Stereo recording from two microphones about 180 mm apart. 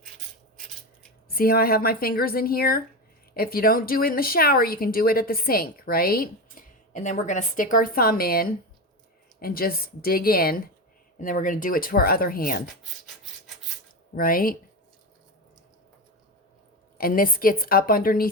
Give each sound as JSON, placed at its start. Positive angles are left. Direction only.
{"t": 1.3, "sound": "speech", "side_deg": 55}
{"t": 14.2, "sound": "speech", "side_deg": 50}
{"t": 17.0, "sound": "speech", "side_deg": 50}